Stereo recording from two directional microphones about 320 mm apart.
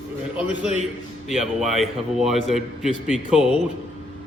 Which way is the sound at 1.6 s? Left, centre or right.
Centre.